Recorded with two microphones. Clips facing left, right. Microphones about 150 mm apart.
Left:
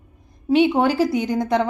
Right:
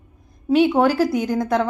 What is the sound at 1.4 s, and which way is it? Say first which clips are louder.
Speech: left 1 dB; centre (ahead or behind).